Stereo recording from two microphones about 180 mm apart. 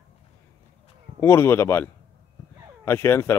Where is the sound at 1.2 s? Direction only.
15° left (ahead or behind).